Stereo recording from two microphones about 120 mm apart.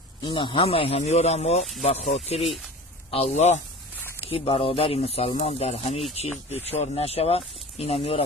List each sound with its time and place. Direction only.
0.2 s a man's voice: 40° left (ahead or behind); by 3.6 s 70° left (ahead or behind)
4.3 s speech: 50° left (ahead or behind)